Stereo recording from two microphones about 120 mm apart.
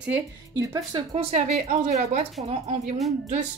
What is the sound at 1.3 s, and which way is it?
Speech, 70° right (ahead or behind).